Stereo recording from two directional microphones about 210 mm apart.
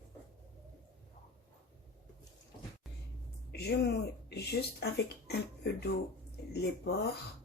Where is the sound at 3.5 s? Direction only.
50° left (ahead or behind).